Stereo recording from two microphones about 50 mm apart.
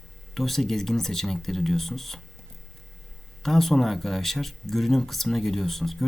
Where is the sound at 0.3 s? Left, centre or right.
Centre.